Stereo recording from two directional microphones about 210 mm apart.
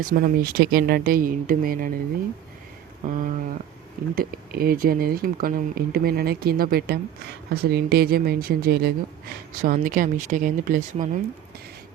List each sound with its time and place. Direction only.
0.0 s speech: 40° right (ahead or behind)
3.1 s speech: 40° right (ahead or behind)